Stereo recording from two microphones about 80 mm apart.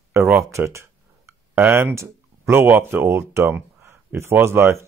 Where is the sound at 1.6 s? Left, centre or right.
Right.